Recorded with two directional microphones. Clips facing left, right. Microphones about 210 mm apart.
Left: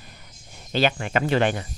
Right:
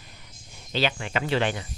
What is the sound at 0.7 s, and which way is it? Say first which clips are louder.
Speech: left 4 dB; 50° left (ahead or behind).